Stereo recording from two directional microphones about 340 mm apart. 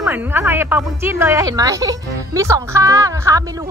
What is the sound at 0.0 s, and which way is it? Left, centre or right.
A woman's voice, centre.